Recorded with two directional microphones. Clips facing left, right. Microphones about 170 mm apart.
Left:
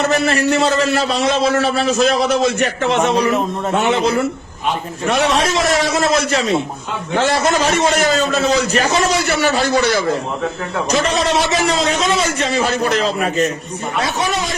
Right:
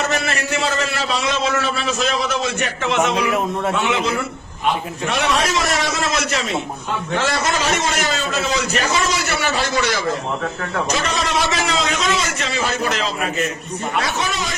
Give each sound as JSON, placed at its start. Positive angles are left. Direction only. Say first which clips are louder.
{"t": 0.0, "sound": "a man's voice", "louder": "left 6 dB", "side_deg": 35}
{"t": 5.2, "sound": "a man's voice", "louder": "left 3 dB", "side_deg": 30}